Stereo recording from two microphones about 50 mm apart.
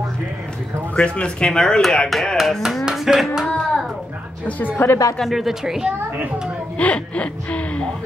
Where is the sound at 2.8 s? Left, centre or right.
Centre.